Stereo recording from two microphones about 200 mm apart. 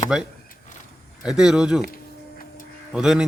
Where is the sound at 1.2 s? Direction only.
5° right (ahead or behind).